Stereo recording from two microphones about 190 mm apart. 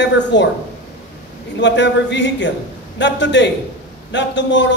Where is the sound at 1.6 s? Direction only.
70° left (ahead or behind).